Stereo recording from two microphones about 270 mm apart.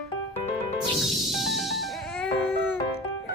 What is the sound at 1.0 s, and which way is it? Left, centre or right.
Music, centre.